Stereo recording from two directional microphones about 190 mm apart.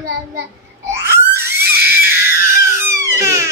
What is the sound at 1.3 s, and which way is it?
Screaming, 10° right (ahead or behind).